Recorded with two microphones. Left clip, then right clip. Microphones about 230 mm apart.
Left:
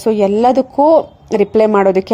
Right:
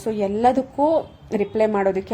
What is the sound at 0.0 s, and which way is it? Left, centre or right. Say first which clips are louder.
A woman's voice: left 8 dB; left.